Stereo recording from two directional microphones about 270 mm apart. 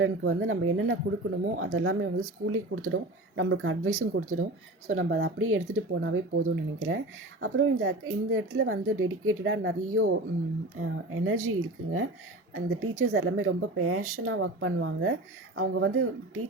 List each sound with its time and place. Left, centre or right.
0.0 s speech: right